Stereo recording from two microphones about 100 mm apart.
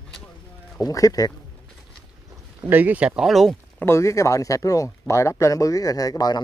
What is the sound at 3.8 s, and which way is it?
Speech, 25° left (ahead or behind).